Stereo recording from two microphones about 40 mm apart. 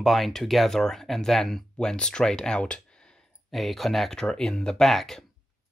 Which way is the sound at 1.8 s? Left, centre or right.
Left.